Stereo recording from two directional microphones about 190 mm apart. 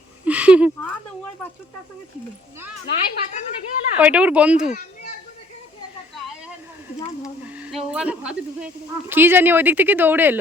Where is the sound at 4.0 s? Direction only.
5° right (ahead or behind).